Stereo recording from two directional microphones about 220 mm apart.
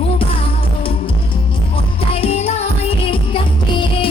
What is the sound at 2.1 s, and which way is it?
Music, 25° left (ahead or behind).